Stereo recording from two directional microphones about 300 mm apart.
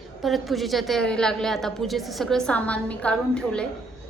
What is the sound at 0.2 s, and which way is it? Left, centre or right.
A woman's voice, centre.